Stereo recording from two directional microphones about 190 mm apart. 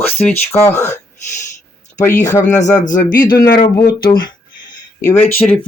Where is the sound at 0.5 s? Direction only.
10° left (ahead or behind).